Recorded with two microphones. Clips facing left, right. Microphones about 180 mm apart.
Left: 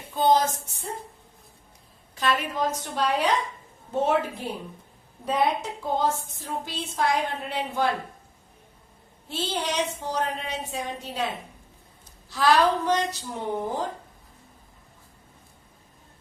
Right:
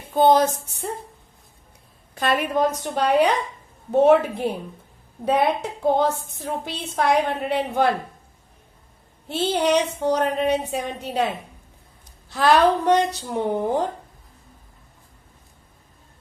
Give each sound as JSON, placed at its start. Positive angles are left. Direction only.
{"t": 0.1, "sound": "a woman's voice", "side_deg": -55}
{"t": 2.1, "sound": "a woman's voice", "side_deg": -55}
{"t": 5.8, "sound": "a woman's voice", "side_deg": -65}
{"t": 9.3, "sound": "a woman's voice", "side_deg": -60}
{"t": 12.3, "sound": "a woman's voice", "side_deg": -60}